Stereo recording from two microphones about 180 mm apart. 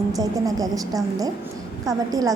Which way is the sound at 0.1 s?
20° right (ahead or behind).